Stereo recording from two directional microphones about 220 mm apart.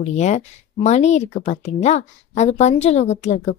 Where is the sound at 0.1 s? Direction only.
30° left (ahead or behind).